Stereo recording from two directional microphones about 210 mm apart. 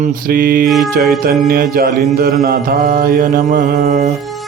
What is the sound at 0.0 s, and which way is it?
Mantra, 40° right (ahead or behind).